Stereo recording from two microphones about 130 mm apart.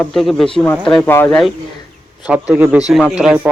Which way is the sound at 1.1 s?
15° left (ahead or behind).